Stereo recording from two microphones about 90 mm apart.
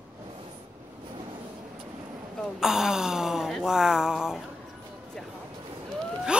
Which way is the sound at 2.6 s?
5° right (ahead or behind).